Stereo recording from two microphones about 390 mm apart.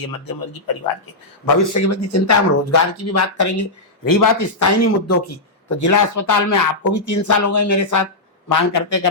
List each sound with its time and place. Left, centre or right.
0.0 s speech: left
1.7 s speech: left